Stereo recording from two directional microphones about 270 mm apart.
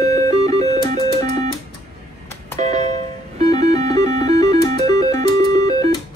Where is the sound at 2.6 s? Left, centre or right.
Right.